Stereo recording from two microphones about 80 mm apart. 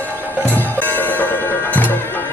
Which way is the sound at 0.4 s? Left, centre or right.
Left.